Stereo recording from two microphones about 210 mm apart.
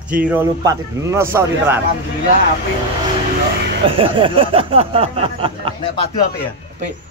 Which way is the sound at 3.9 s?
25° right (ahead or behind).